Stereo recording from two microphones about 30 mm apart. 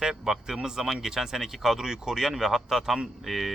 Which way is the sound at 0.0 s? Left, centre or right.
Centre.